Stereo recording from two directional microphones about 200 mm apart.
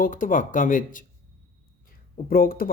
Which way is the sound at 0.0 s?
40° left (ahead or behind).